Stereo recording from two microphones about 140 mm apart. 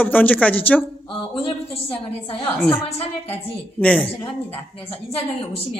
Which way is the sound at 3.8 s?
10° left (ahead or behind).